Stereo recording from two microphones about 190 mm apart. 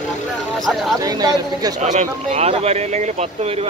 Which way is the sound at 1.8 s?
35° right (ahead or behind).